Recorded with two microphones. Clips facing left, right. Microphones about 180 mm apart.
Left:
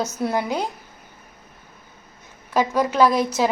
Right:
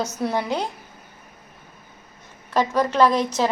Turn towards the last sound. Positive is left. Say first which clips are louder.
# left 1 dB
turn(degrees=5)  # may be behind; listen again after turning